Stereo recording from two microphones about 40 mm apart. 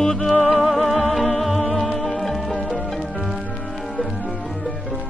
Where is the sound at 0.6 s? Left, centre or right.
Centre.